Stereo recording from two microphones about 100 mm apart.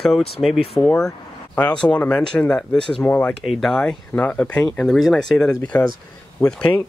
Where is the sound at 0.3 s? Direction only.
Centre (ahead or behind).